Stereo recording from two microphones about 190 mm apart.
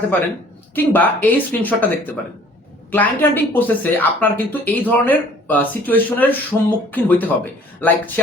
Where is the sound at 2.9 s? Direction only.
10° left (ahead or behind).